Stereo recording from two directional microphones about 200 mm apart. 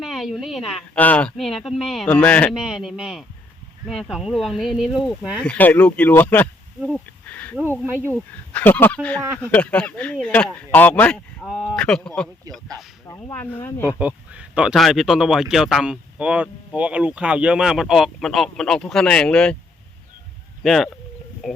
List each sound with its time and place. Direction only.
0.0 s speech: centre (ahead or behind)
7.3 s a sound: 10° left (ahead or behind)
7.9 s speech: 10° left (ahead or behind)
13.1 s speech: 15° left (ahead or behind)
13.8 s speech: 5° right (ahead or behind)
20.7 s speech: centre (ahead or behind)